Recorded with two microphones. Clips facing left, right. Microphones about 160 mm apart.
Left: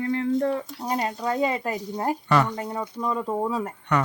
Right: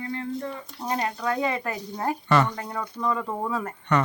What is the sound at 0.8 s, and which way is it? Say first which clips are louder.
Speech: right 1 dB; 10° left (ahead or behind).